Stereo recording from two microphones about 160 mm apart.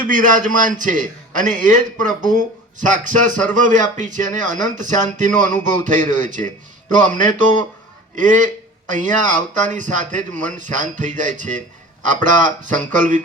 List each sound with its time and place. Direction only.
0.1 s a man's voice: 55° right (ahead or behind)